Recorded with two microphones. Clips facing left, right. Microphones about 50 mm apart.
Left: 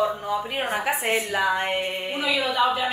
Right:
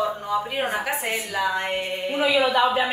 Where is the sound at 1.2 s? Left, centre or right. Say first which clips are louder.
Left 1 dB; left.